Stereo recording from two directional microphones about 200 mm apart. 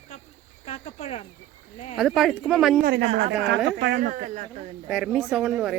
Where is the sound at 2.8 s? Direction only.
55° right (ahead or behind); by 4.7 s 35° right (ahead or behind).